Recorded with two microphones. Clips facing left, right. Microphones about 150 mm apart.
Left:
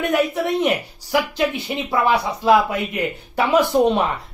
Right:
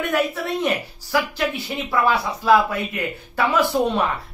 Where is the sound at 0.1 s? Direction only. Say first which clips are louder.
Left 4 dB; 20° left (ahead or behind).